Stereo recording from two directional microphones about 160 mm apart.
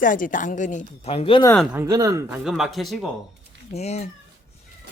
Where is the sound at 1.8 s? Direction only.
20° right (ahead or behind).